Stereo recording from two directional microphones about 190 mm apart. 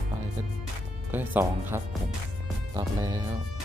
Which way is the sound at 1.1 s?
10° right (ahead or behind).